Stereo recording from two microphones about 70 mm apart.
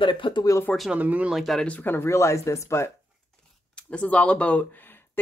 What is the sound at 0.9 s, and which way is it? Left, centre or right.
Speech, right.